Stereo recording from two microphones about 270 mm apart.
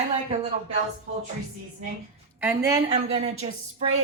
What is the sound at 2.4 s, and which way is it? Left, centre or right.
A woman's voice, centre.